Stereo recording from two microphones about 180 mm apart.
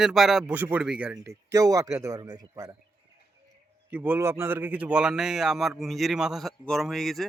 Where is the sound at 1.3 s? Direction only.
20° right (ahead or behind).